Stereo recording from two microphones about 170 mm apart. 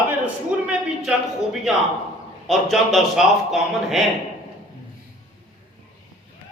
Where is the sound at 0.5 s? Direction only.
10° right (ahead or behind).